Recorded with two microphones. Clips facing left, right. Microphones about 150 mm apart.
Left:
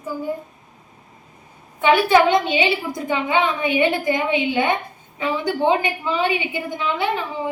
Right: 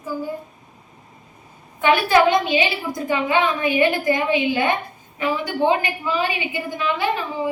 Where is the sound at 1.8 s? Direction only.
20° left (ahead or behind).